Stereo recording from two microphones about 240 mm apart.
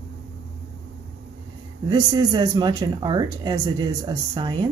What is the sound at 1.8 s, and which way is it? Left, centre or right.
Speech, centre.